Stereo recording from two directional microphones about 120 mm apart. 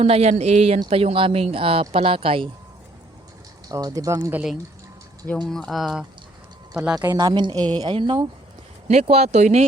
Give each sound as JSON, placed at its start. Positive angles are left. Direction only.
{"t": 0.0, "sound": "speech", "side_deg": -65}
{"t": 3.7, "sound": "speech", "side_deg": -30}
{"t": 5.3, "sound": "speech", "side_deg": 5}
{"t": 7.1, "sound": "a woman's voice", "side_deg": -35}
{"t": 8.9, "sound": "speech", "side_deg": -60}